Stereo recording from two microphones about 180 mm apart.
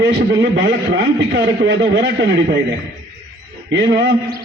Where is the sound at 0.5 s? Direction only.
70° right (ahead or behind).